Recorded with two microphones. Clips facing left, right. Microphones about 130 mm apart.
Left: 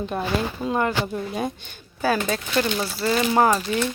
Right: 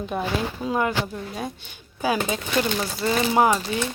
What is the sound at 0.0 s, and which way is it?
Speech, 5° right (ahead or behind).